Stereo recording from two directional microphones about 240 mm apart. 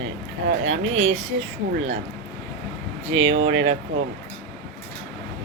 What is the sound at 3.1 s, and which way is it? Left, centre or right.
Speech, right.